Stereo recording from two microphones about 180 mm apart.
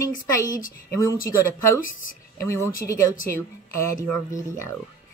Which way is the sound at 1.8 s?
50° left (ahead or behind).